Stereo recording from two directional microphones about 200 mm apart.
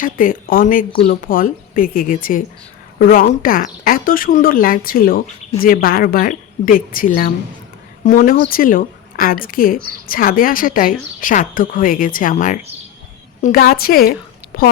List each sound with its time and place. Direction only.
0.0 s a woman's voice: 45° left (ahead or behind)